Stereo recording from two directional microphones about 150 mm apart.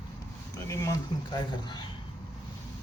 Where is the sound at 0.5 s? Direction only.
20° left (ahead or behind).